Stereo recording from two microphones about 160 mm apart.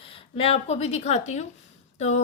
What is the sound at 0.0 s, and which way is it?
A woman's voice, 35° left (ahead or behind).